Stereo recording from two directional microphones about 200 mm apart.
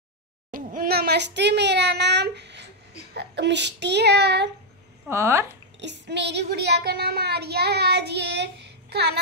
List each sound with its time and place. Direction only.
0.5 s a child's voice: 45° right (ahead or behind); by 2.7 s 60° right (ahead or behind)
3.2 s child singing: 60° right (ahead or behind)
5.0 s speech: 15° right (ahead or behind)
5.8 s child singing: 60° right (ahead or behind)